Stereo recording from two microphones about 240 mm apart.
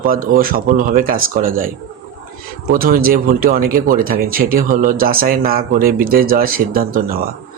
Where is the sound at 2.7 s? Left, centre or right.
Right.